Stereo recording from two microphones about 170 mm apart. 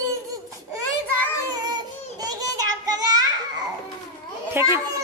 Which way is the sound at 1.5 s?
25° right (ahead or behind).